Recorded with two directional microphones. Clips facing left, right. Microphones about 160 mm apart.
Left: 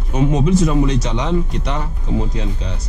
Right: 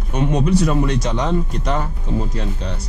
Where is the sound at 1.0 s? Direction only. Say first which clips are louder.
Even; 45° right (ahead or behind).